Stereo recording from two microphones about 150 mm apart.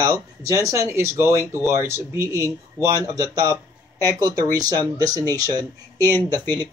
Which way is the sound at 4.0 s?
25° right (ahead or behind).